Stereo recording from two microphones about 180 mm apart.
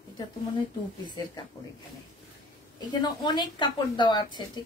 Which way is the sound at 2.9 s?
25° left (ahead or behind).